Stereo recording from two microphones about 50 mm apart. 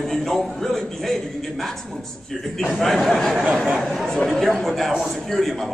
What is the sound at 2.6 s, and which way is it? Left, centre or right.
Speech, centre.